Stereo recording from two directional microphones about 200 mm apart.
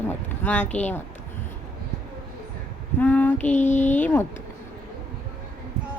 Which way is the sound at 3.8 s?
10° left (ahead or behind).